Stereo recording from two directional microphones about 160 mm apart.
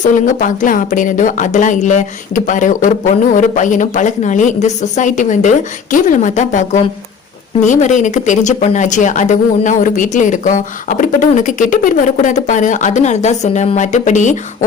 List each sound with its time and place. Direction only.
0.0 s speech: 55° left (ahead or behind)